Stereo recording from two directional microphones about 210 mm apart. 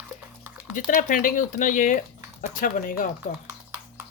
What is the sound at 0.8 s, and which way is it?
Speech, 40° left (ahead or behind).